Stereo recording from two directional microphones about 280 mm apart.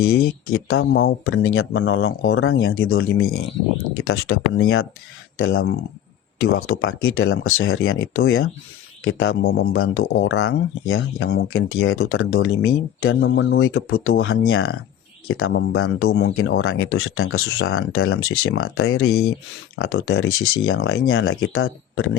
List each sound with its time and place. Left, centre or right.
0.2 s speech: left
9.4 s speech: left
9.7 s speech: left
10.3 s speech: left
16.0 s speech: left